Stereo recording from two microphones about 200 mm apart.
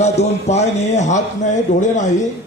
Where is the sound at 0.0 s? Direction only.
35° left (ahead or behind).